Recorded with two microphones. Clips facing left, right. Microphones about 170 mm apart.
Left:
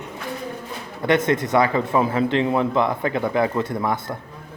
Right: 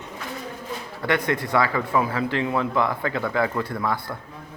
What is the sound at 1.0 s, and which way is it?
Speech, 20° left (ahead or behind).